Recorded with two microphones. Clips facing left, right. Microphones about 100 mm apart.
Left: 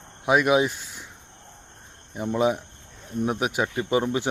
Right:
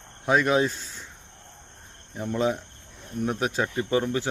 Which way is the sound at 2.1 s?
15° left (ahead or behind).